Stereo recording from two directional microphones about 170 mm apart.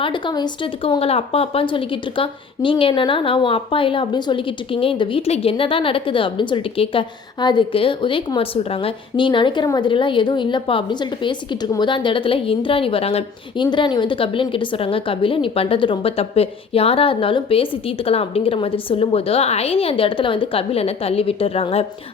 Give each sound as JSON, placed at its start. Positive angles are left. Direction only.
{"t": 0.0, "sound": "speech", "side_deg": 30}